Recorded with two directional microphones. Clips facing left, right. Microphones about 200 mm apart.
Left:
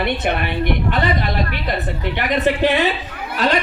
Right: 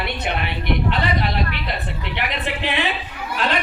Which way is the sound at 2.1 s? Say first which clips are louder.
Left 8 dB; 45° left (ahead or behind).